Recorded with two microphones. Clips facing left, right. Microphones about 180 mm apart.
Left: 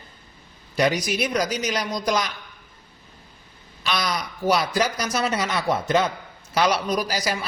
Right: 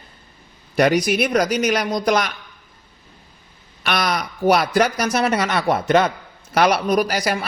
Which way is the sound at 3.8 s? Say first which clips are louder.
Right 4 dB; 65° right (ahead or behind).